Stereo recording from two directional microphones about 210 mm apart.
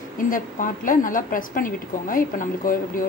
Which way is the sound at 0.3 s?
40° left (ahead or behind).